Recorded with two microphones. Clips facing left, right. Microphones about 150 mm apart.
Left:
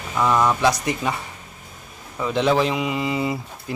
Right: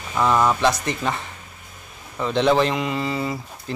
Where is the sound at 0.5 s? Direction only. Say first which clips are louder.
Left 1 dB; 15° left (ahead or behind).